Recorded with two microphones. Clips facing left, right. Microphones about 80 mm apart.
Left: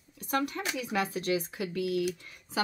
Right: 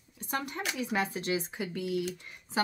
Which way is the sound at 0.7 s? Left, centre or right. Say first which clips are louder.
Even; right.